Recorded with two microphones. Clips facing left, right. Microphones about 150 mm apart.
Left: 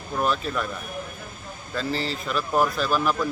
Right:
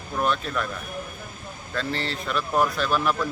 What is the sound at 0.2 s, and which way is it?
Speech, centre (ahead or behind).